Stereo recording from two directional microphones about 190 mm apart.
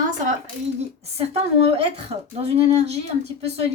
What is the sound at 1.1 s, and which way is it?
A woman's voice, 35° right (ahead or behind).